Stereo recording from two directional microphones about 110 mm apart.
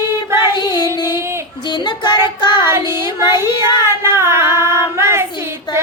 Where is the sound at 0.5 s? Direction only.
40° left (ahead or behind).